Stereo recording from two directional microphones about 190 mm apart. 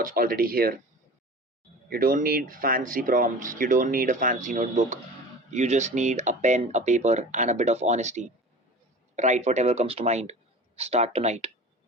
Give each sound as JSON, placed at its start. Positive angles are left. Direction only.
{"t": 0.0, "sound": "speech", "side_deg": -50}
{"t": 1.9, "sound": "speech", "side_deg": -50}